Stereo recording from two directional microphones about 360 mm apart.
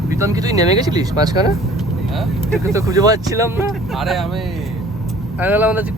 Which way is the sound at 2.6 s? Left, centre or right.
Centre.